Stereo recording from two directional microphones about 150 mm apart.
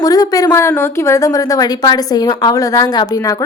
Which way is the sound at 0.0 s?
25° left (ahead or behind).